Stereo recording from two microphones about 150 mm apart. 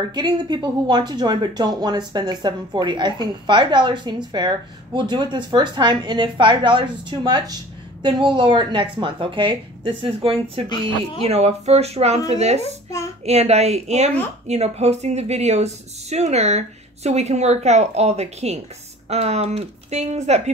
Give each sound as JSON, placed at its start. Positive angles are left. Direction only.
{"t": 0.1, "sound": "speech", "side_deg": -30}